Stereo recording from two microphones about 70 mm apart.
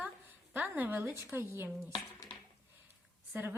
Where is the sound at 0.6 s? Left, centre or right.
Right.